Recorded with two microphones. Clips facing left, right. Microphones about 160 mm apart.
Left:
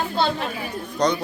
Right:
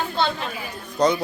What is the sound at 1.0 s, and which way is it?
Speech, 5° right (ahead or behind).